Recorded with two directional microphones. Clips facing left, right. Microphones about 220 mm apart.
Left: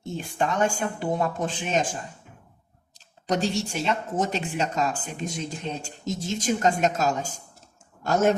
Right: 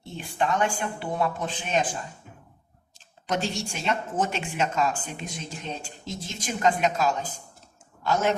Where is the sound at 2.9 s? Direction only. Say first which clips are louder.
Left 3 dB; 40° left (ahead or behind).